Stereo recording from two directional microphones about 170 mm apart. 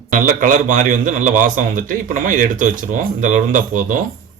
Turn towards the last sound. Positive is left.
turn(degrees=-50)  # may be behind; listen again after turning